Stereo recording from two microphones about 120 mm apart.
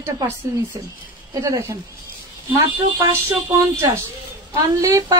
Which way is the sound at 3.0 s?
20° right (ahead or behind).